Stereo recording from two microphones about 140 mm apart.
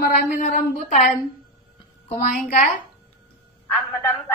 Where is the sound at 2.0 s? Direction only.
60° left (ahead or behind).